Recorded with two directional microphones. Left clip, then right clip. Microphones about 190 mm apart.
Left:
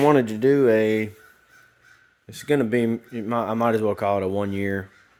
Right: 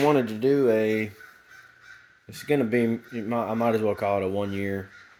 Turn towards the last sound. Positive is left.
turn(degrees=25)  # may be behind; listen again after turning